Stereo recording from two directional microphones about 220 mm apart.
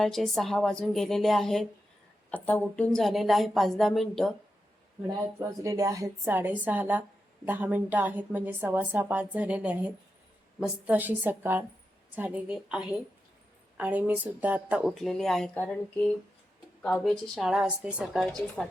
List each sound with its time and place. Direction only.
0.0 s speech: centre (ahead or behind)
5.4 s a woman's voice: 15° right (ahead or behind); by 18.7 s centre (ahead or behind)